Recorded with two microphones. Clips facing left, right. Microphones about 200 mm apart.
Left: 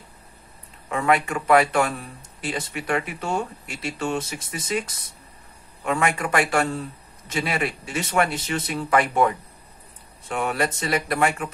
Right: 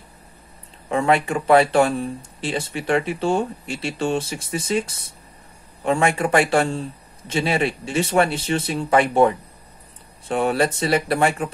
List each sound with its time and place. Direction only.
0.8 s speech: 30° right (ahead or behind)